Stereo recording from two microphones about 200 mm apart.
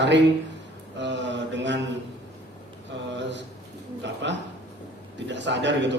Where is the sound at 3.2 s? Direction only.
60° right (ahead or behind).